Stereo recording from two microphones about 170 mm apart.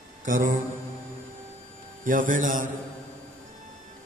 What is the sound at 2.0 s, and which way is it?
Speech, 50° right (ahead or behind).